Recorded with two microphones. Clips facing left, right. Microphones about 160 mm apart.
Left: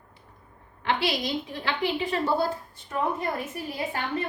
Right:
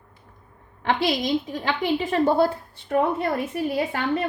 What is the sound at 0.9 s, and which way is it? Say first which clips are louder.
Speech: right 4 dB; 45° right (ahead or behind).